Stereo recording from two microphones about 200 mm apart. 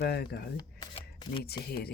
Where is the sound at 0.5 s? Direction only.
25° left (ahead or behind).